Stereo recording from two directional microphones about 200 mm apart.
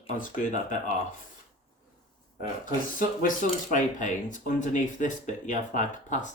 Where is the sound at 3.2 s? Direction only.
40° left (ahead or behind).